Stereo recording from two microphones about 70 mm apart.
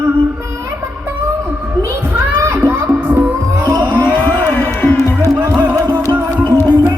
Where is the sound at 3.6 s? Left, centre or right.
Right.